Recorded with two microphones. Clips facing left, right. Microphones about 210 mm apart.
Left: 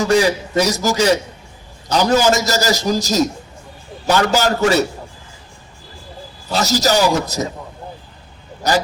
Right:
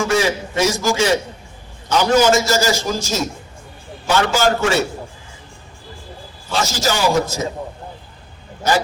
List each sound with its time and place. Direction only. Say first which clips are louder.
0.0 s a man's voice: left 3 dB; 40° left (ahead or behind)
6.5 s a man's voice: left 4 dB; 40° left (ahead or behind)